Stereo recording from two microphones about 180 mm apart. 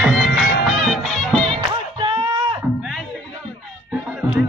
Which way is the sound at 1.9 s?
25° right (ahead or behind).